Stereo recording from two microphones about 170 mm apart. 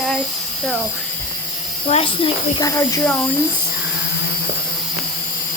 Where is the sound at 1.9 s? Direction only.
35° left (ahead or behind).